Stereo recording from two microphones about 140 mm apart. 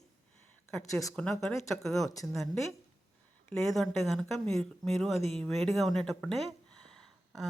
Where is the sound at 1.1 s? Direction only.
5° left (ahead or behind).